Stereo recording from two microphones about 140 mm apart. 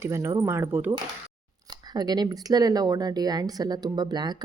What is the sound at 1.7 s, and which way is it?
Speech, 30° right (ahead or behind).